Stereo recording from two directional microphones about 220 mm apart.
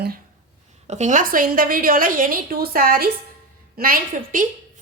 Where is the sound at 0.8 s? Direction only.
30° right (ahead or behind).